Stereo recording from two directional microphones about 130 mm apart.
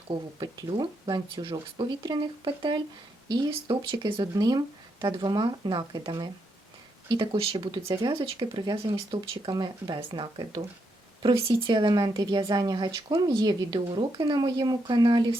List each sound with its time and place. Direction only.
0.1 s speech: 35° right (ahead or behind)
7.8 s speech: 25° right (ahead or behind)
8.0 s speech: 35° right (ahead or behind)